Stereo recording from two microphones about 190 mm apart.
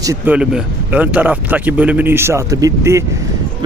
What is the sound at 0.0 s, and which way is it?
Speech, 15° right (ahead or behind).